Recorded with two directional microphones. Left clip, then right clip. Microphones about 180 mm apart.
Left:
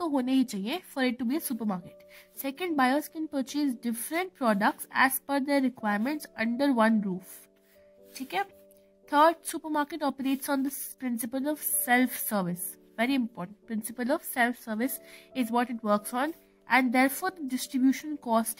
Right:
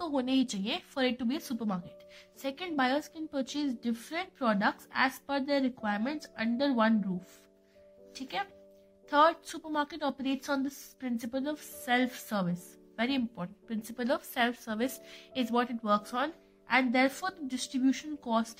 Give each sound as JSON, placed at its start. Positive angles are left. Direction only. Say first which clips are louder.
{"t": 0.0, "sound": "a woman's voice", "louder": "left 3 dB", "side_deg": 55}
{"t": 8.1, "sound": "a woman's voice", "louder": "left 4 dB", "side_deg": 55}